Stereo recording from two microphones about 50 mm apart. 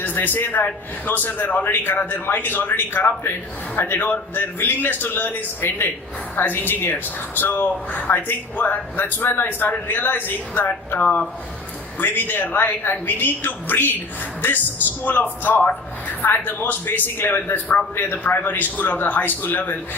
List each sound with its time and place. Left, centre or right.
0.0 s a man's voice: left
18.2 s a man's voice: left